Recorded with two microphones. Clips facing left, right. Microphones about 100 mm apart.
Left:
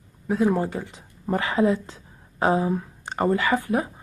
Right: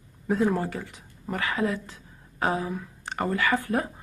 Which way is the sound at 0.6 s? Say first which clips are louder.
Left 4 dB; 20° left (ahead or behind).